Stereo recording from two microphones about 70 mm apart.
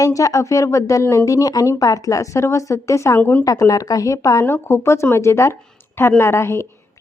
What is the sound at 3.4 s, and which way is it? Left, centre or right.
Speech, left.